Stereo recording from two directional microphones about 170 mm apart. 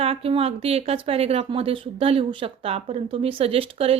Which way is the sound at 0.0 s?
35° right (ahead or behind).